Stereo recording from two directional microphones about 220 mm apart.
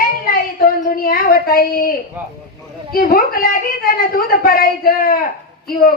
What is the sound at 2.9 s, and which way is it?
A woman's voice, 40° left (ahead or behind).